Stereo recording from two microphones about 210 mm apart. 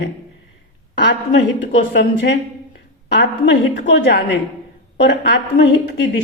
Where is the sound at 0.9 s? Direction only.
55° left (ahead or behind).